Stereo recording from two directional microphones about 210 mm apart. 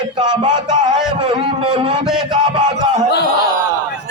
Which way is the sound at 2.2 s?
25° right (ahead or behind).